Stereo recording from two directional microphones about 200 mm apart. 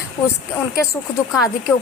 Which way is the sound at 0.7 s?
15° left (ahead or behind).